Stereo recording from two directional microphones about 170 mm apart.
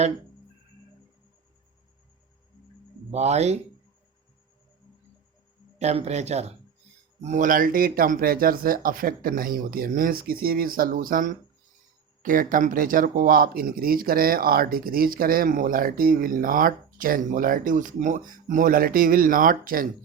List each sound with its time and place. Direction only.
3.1 s speech: 40° right (ahead or behind)
5.8 s speech: 40° right (ahead or behind); by 19.9 s 55° right (ahead or behind)